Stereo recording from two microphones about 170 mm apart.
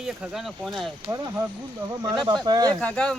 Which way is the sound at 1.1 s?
20° right (ahead or behind).